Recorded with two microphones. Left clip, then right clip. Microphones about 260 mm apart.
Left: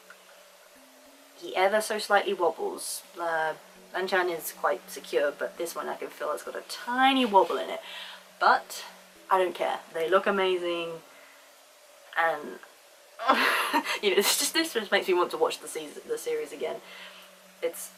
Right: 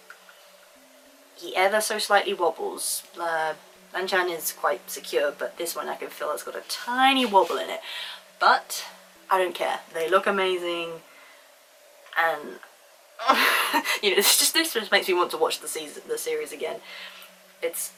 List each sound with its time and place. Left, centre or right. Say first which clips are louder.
1.5 s speech: right 3 dB; centre
2.4 s speech: right 2 dB; left
3.2 s speech: right 2 dB; centre
12.1 s speech: right 3 dB; centre